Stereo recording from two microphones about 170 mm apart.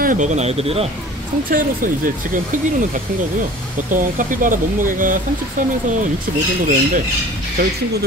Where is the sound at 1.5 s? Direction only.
55° right (ahead or behind).